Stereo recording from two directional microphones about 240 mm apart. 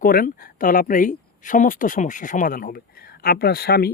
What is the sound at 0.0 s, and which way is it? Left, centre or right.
Speech, left.